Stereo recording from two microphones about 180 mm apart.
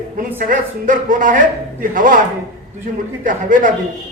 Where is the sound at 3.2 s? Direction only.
50° right (ahead or behind).